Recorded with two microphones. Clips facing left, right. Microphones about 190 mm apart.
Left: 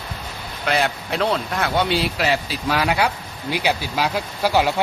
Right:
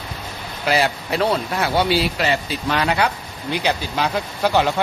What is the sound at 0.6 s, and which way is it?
Speech, 5° right (ahead or behind).